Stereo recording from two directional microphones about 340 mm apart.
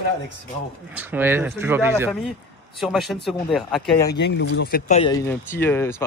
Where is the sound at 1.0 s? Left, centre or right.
Centre.